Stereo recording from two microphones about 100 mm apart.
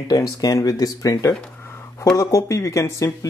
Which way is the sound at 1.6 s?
25° left (ahead or behind).